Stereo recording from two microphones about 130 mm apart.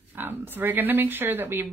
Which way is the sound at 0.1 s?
15° right (ahead or behind).